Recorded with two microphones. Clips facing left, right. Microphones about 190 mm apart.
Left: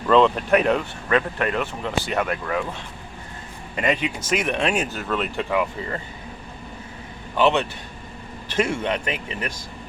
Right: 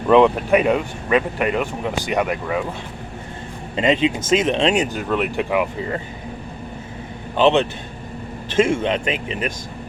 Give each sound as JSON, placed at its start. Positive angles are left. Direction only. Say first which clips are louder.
{"t": 0.1, "sound": "speech", "louder": "right 3 dB", "side_deg": -15}
{"t": 3.8, "sound": "speech", "louder": "right 6 dB", "side_deg": -25}
{"t": 7.3, "sound": "speech", "louder": "right 4 dB", "side_deg": -20}